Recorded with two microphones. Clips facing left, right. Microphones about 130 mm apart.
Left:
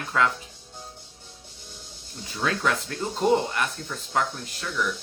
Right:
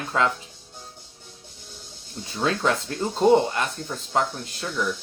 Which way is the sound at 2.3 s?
25° right (ahead or behind).